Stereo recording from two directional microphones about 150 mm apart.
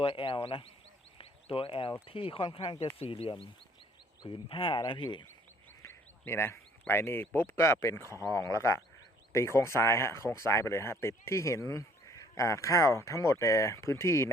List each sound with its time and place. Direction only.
0.0 s speech: 35° left (ahead or behind)
5.8 s speech: 15° left (ahead or behind)